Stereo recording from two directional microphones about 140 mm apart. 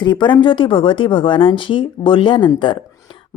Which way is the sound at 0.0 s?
35° left (ahead or behind).